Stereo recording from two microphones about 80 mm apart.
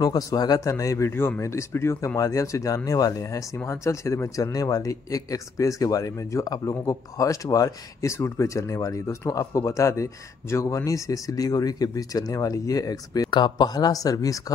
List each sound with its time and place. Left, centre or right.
0.0 s speech: left
2.1 s speech: left
13.3 s speech: left